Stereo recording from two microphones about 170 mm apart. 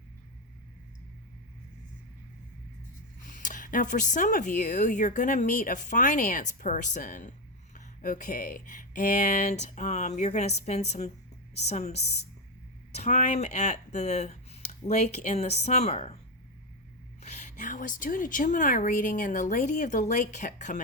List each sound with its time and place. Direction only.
3.2 s speech: 50° left (ahead or behind)
17.2 s speech: 40° left (ahead or behind)